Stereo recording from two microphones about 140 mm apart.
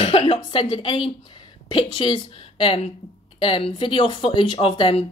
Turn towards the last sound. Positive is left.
turn(degrees=40)  # may be behind; listen again after turning